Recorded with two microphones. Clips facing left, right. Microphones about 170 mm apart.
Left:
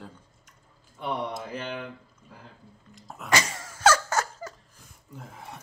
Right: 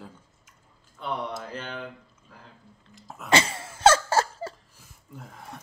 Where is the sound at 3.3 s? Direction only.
30° right (ahead or behind).